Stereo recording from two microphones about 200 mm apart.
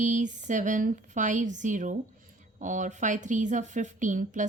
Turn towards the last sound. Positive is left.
turn(degrees=-40)  # may be behind; listen again after turning